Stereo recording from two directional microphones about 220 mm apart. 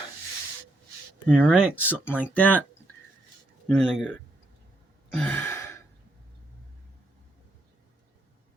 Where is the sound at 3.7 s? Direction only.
5° left (ahead or behind).